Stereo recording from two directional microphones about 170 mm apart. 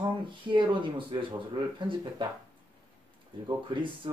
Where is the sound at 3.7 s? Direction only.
30° right (ahead or behind).